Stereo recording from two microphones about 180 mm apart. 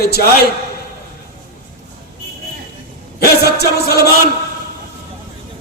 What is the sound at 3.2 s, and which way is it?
Music, 60° left (ahead or behind).